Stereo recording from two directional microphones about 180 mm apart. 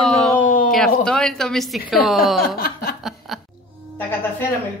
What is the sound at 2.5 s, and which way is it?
Chuckle, 60° left (ahead or behind).